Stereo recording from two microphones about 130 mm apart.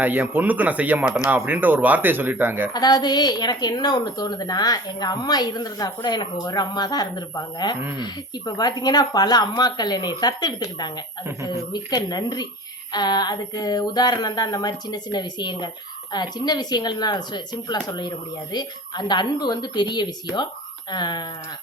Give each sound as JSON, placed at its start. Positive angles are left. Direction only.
{"t": 0.0, "sound": "speech", "side_deg": -15}
{"t": 2.7, "sound": "a woman's voice", "side_deg": 30}